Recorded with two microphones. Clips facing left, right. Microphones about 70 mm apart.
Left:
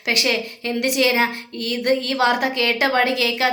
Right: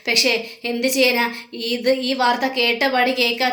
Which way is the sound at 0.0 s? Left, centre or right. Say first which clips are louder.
Right 1 dB; left.